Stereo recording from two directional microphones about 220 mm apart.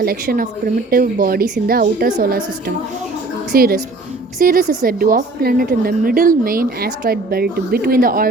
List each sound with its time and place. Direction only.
0.0 s a woman's voice: 40° right (ahead or behind)